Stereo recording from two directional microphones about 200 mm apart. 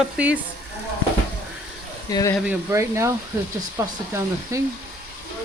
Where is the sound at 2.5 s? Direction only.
15° right (ahead or behind).